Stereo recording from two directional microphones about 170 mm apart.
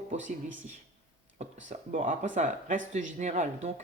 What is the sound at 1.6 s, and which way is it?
Speech, 45° right (ahead or behind).